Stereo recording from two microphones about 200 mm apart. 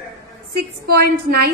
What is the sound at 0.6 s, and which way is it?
Speech, 50° right (ahead or behind).